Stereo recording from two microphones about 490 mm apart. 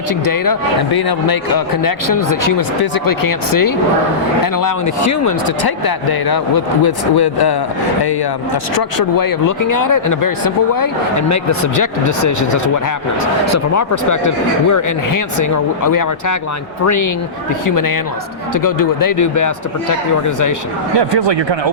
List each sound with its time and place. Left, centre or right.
0.3 s speech: left
5.2 s speech: left
9.1 s speech: left